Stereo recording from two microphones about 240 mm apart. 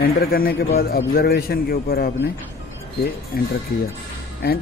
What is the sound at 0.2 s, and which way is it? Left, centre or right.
A man's voice, left.